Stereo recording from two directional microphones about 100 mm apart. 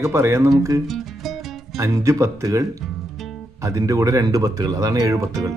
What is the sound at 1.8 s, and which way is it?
Speech, 30° right (ahead or behind).